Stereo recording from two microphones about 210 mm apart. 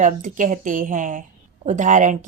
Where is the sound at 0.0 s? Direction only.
40° right (ahead or behind).